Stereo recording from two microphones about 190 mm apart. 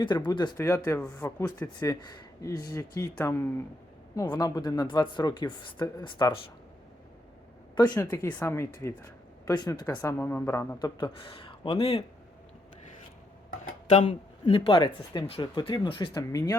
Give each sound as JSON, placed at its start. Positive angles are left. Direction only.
{"t": 0.0, "sound": "speech", "side_deg": 25}
{"t": 7.8, "sound": "speech", "side_deg": 20}
{"t": 13.9, "sound": "speech", "side_deg": 35}